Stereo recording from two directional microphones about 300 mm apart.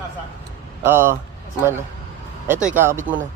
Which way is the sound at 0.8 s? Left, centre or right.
Centre.